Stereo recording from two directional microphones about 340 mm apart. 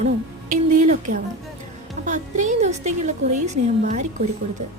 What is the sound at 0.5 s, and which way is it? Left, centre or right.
A woman's voice, right.